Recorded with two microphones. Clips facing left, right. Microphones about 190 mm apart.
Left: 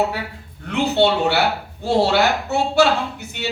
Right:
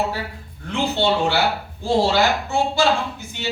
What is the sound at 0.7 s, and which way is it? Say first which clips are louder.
Speech: left 3 dB; 65° left (ahead or behind).